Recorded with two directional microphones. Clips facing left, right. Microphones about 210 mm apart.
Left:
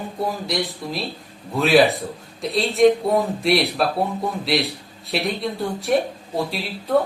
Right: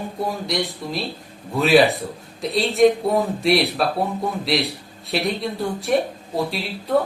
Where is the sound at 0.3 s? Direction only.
Centre (ahead or behind).